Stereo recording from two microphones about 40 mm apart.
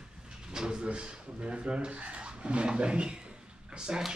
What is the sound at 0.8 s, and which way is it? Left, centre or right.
Speech, right.